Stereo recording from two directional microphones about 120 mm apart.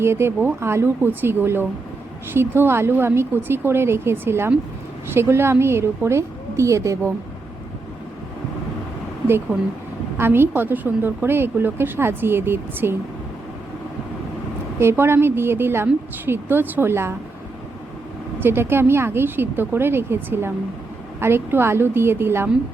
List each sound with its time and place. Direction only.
0.0 s a woman's voice: 20° right (ahead or behind)
9.2 s a woman's voice: 20° right (ahead or behind)
14.8 s a woman's voice: 20° right (ahead or behind)
18.3 s a woman's voice: 20° right (ahead or behind)